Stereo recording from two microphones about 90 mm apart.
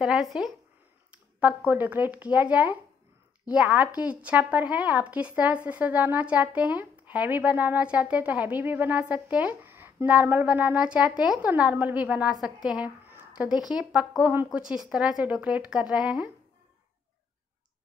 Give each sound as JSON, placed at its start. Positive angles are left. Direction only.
{"t": 0.0, "sound": "speech", "side_deg": -5}
{"t": 1.7, "sound": "a woman's voice", "side_deg": -20}
{"t": 14.3, "sound": "a woman's voice", "side_deg": -20}
{"t": 14.6, "sound": "a woman's voice", "side_deg": -10}